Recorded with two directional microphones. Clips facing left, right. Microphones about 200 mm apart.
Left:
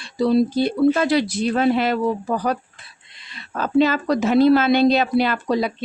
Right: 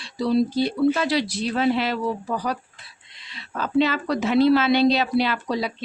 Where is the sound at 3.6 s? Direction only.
45° left (ahead or behind).